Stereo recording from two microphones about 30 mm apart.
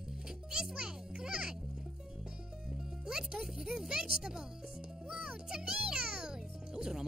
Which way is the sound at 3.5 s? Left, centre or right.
Centre.